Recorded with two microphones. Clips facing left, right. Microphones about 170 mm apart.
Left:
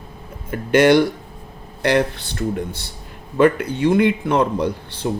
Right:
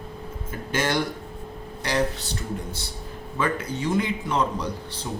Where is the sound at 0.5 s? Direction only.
65° left (ahead or behind).